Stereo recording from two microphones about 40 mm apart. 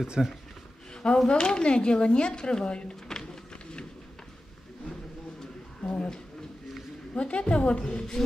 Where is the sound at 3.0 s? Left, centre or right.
Centre.